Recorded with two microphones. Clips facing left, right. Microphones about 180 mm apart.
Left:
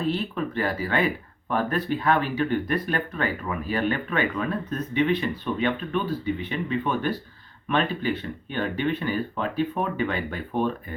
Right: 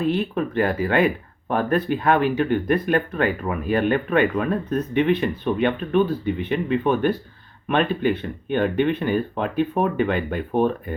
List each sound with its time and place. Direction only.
0.0 s speech: 55° right (ahead or behind)